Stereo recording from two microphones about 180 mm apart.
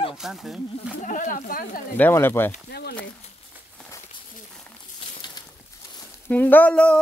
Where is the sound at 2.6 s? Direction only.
65° left (ahead or behind).